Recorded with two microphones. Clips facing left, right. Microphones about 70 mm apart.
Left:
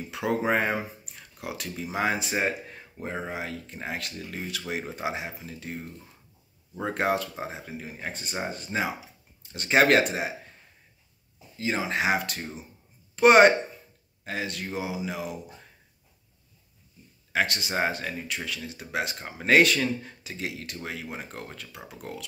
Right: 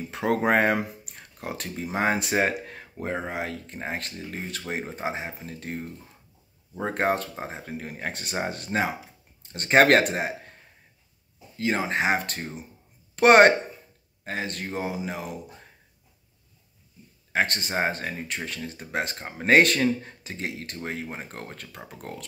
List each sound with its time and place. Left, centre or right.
0.1 s speech: right
0.4 s speech: right
1.1 s speech: right
2.1 s speech: right
9.4 s speech: right
11.5 s speech: right
13.1 s speech: right
14.2 s speech: right
17.3 s speech: right